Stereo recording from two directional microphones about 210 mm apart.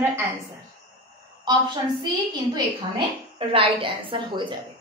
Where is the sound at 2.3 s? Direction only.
20° right (ahead or behind).